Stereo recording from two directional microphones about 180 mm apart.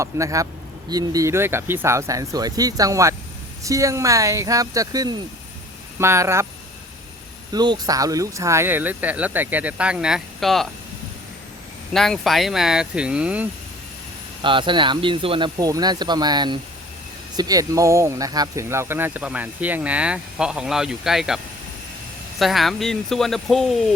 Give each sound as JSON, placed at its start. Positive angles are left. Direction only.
{"t": 0.0, "sound": "speech", "side_deg": -15}
{"t": 7.5, "sound": "speech", "side_deg": -25}
{"t": 11.9, "sound": "speech", "side_deg": 0}
{"t": 14.4, "sound": "speech", "side_deg": -25}